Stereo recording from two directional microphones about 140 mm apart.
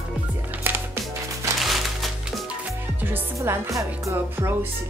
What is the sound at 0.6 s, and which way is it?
Music, 15° right (ahead or behind).